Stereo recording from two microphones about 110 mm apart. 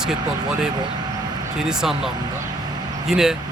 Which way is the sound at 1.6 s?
5° right (ahead or behind).